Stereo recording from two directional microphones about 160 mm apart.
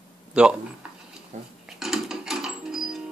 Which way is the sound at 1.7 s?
Centre (ahead or behind).